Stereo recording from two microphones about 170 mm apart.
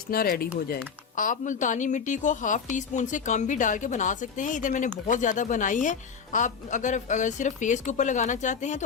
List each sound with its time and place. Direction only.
0.1 s speech: 60° left (ahead or behind)
1.1 s a woman's voice: 50° left (ahead or behind)